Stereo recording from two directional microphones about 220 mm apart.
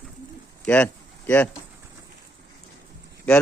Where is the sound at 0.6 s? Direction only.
5° left (ahead or behind).